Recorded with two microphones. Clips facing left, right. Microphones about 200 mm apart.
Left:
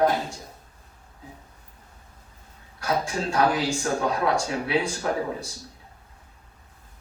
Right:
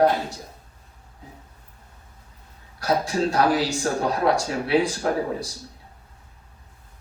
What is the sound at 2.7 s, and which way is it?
A man's voice, 35° right (ahead or behind).